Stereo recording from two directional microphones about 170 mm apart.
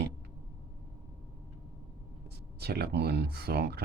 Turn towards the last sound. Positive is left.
turn(degrees=-70)  # may be behind; listen again after turning